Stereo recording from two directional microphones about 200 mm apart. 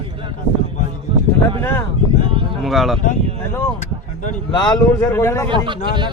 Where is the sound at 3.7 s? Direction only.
40° left (ahead or behind).